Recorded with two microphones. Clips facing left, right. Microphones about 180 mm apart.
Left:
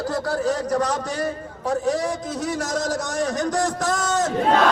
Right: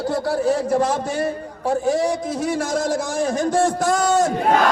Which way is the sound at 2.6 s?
30° right (ahead or behind).